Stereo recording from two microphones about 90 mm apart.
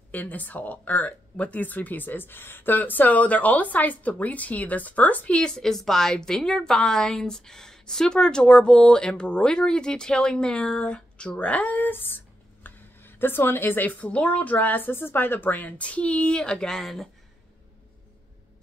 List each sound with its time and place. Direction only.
0.1 s speech: 20° left (ahead or behind); by 17.1 s centre (ahead or behind)